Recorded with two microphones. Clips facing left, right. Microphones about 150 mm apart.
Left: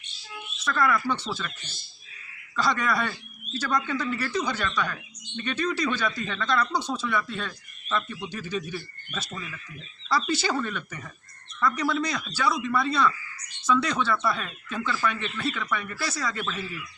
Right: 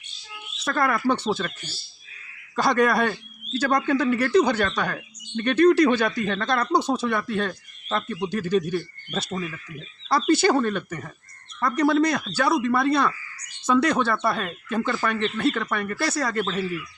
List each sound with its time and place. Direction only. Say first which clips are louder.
0.6 s speech: right 2 dB; 50° right (ahead or behind)
2.6 s speech: right 6 dB; 55° right (ahead or behind)
9.3 s speech: right 8 dB; 45° right (ahead or behind)
10.1 s speech: right 7 dB; 55° right (ahead or behind)